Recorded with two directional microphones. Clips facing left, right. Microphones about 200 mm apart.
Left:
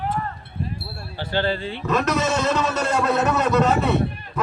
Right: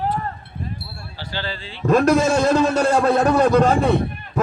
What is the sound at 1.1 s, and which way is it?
Speech, 55° left (ahead or behind).